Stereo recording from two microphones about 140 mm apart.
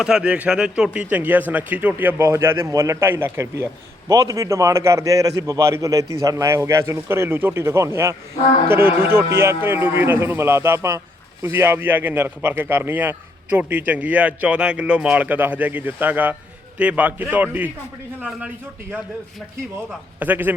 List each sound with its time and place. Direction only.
0.0 s a man's voice: 5° right (ahead or behind)
20.1 s a man's voice: 15° right (ahead or behind)